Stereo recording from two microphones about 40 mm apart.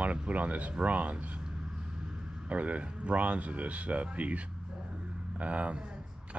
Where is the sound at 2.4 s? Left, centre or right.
Right.